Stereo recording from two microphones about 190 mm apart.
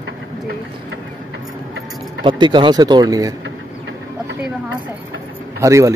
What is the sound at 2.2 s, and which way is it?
Speech, 25° right (ahead or behind).